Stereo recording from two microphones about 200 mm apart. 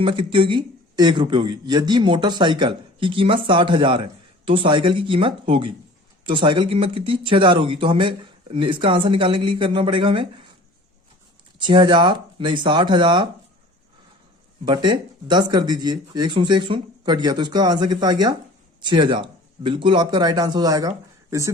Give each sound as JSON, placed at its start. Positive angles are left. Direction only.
{"t": 0.0, "sound": "speech", "side_deg": -25}
{"t": 11.6, "sound": "speech", "side_deg": -25}
{"t": 14.6, "sound": "speech", "side_deg": -20}